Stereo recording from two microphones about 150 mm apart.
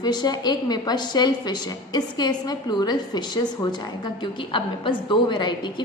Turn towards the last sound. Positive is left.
turn(degrees=30)  # may be behind; listen again after turning